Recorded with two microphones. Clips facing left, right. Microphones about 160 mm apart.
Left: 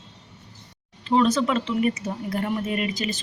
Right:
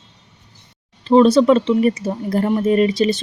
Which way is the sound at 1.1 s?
30° right (ahead or behind).